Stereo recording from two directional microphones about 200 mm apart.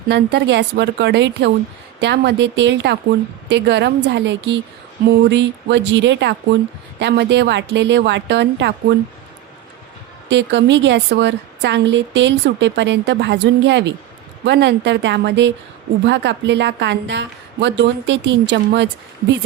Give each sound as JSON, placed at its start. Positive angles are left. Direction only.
{"t": 0.1, "sound": "a woman's voice", "side_deg": -60}
{"t": 10.2, "sound": "a woman's voice", "side_deg": -65}